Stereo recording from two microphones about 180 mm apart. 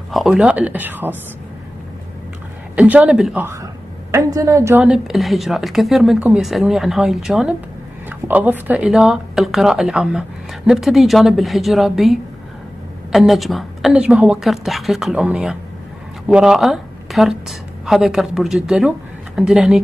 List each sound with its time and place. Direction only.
0.1 s speech: centre (ahead or behind)
2.7 s speech: 5° right (ahead or behind)
4.1 s speech: 20° right (ahead or behind)
4.8 s a woman's voice: 5° right (ahead or behind)